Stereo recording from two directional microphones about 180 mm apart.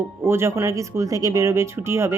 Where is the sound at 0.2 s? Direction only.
15° right (ahead or behind).